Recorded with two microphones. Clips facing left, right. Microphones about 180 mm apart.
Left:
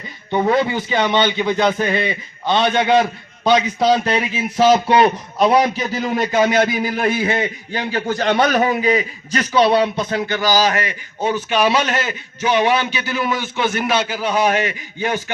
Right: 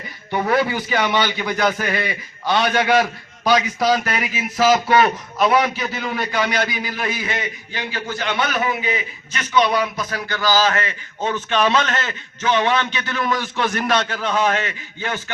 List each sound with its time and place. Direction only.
0.3 s a man's voice: 20° left (ahead or behind); by 7.3 s 50° left (ahead or behind)
7.4 s a man's voice: 40° left (ahead or behind); by 15.2 s 15° left (ahead or behind)